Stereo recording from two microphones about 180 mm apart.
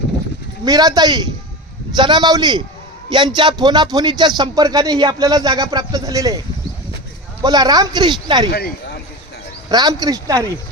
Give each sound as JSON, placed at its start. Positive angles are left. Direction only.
{"t": 0.6, "sound": "speech", "side_deg": -20}
{"t": 7.4, "sound": "speech", "side_deg": -20}
{"t": 8.4, "sound": "speech", "side_deg": 60}
{"t": 9.6, "sound": "speech", "side_deg": -20}